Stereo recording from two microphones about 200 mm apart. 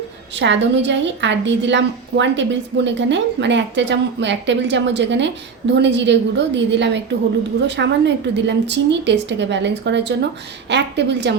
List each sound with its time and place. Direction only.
0.3 s a woman's voice: 65° right (ahead or behind)